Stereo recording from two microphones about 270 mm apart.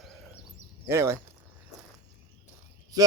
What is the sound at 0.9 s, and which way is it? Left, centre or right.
Speech, centre.